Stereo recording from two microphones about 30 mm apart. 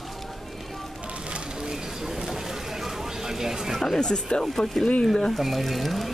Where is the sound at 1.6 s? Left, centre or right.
Centre.